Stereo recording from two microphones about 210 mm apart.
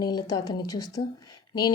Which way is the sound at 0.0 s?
20° left (ahead or behind).